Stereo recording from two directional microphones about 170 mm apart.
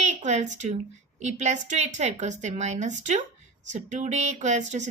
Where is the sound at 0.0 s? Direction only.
45° right (ahead or behind).